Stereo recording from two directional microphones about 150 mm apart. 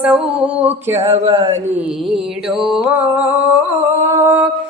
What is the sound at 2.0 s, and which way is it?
Mantra, centre (ahead or behind).